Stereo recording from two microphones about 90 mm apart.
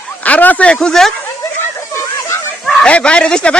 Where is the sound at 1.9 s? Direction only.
30° left (ahead or behind).